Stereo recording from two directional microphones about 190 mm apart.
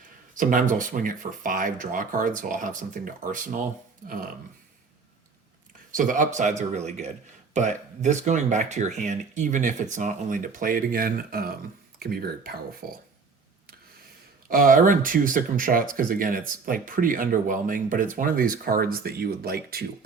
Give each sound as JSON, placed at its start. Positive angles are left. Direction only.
{"t": 0.3, "sound": "speech", "side_deg": -45}
{"t": 5.9, "sound": "speech", "side_deg": -45}
{"t": 14.5, "sound": "speech", "side_deg": -45}